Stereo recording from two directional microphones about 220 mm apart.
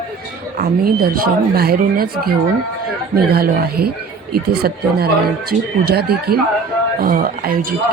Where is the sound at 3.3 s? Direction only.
45° right (ahead or behind).